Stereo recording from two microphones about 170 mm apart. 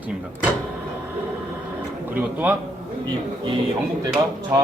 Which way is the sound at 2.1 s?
10° right (ahead or behind).